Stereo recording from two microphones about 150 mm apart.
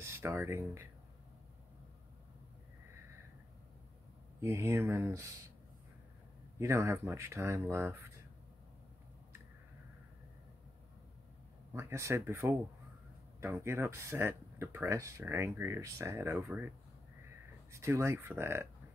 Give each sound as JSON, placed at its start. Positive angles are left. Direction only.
{"t": 0.0, "sound": "speech", "side_deg": -15}
{"t": 4.4, "sound": "speech", "side_deg": -20}
{"t": 6.6, "sound": "speech", "side_deg": -20}
{"t": 11.7, "sound": "speech", "side_deg": -20}